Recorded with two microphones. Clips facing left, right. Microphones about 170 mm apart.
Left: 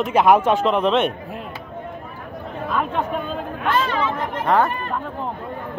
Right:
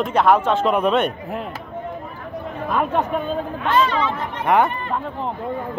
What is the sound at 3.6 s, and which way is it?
Speech, 50° left (ahead or behind).